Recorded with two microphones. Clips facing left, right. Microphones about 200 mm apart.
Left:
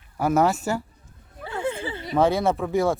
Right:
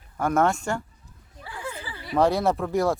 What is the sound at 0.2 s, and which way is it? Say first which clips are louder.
Speech: left 2 dB; 5° left (ahead or behind).